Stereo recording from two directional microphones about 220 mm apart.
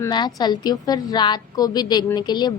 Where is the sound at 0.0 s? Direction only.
20° left (ahead or behind).